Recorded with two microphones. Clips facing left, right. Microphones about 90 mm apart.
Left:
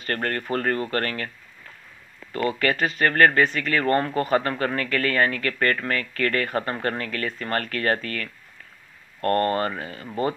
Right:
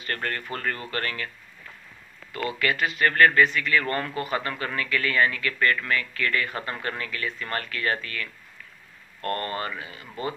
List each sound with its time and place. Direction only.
0.0 s speech: 40° left (ahead or behind)
2.3 s speech: 40° left (ahead or behind)